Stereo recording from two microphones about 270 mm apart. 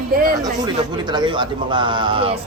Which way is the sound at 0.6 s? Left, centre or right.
Centre.